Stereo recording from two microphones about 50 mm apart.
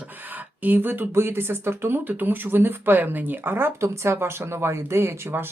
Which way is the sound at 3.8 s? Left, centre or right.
Right.